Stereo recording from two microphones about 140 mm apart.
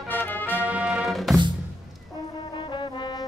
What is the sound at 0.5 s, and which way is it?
Music, 10° right (ahead or behind).